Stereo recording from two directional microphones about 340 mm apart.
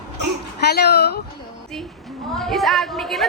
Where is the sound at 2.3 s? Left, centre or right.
Centre.